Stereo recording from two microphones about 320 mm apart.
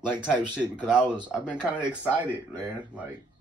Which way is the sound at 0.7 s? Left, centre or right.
Centre.